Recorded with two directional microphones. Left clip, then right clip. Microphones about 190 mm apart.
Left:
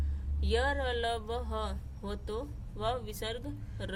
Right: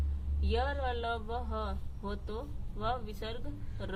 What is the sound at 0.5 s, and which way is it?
A woman's voice, 40° left (ahead or behind).